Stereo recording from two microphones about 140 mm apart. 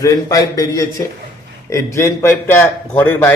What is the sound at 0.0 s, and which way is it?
A man's voice, 25° left (ahead or behind).